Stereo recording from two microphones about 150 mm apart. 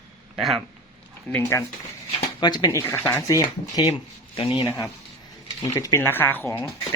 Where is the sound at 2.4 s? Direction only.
25° left (ahead or behind).